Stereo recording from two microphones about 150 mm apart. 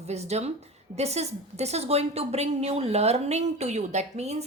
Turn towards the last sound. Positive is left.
turn(degrees=-45)  # may be behind; listen again after turning